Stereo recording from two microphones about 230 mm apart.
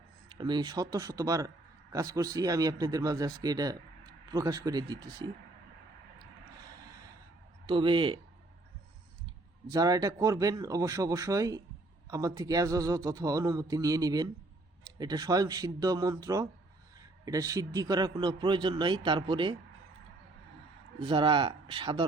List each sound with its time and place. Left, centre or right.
0.3 s speech: centre
7.7 s a man's voice: right
9.6 s a man's voice: centre
21.0 s a man's voice: right